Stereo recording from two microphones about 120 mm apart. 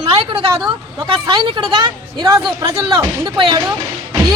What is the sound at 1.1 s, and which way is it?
A woman's voice, 45° right (ahead or behind).